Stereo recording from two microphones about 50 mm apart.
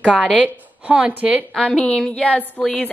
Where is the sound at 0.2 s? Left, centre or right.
Right.